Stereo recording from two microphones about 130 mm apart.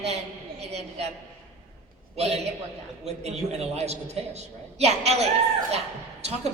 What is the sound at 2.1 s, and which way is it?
A man's voice, 55° right (ahead or behind).